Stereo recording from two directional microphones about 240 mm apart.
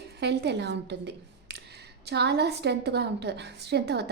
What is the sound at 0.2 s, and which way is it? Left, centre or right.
A woman's voice, right.